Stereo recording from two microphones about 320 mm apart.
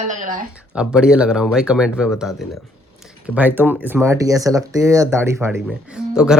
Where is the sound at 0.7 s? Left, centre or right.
Centre.